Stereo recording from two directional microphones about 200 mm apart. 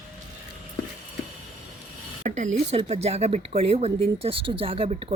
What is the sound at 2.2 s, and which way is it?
Speech, 35° right (ahead or behind).